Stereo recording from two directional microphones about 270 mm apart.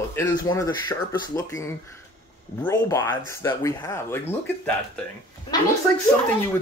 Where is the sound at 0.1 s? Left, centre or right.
Centre.